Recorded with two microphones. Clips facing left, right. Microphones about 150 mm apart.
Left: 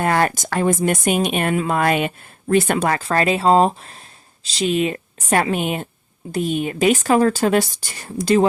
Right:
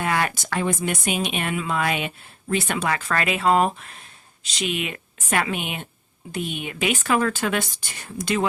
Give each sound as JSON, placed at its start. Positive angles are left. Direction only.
{"t": 0.0, "sound": "speech", "side_deg": 45}
{"t": 3.0, "sound": "a woman's voice", "side_deg": 35}